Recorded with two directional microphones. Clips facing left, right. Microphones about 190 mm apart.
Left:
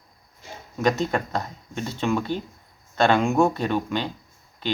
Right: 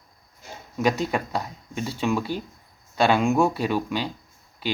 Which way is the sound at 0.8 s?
10° right (ahead or behind).